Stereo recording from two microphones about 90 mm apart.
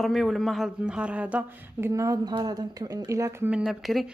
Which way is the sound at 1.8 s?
30° right (ahead or behind).